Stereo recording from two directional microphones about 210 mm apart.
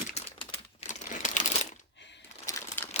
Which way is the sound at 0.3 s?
30° left (ahead or behind).